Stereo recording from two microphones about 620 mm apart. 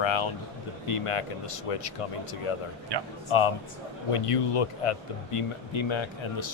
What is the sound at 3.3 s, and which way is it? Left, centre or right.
Speech, left.